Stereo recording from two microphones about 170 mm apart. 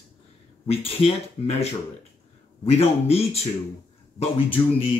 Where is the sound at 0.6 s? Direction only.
35° left (ahead or behind).